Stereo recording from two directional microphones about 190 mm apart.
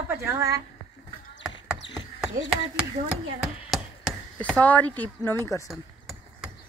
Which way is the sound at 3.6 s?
Centre (ahead or behind).